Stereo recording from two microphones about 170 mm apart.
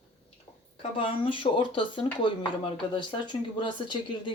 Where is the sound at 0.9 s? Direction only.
30° left (ahead or behind).